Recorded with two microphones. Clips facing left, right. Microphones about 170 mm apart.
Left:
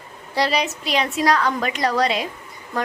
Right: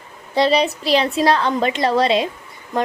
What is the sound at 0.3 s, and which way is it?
A woman's voice, 25° right (ahead or behind).